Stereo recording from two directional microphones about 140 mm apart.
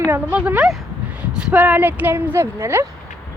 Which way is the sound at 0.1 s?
10° right (ahead or behind).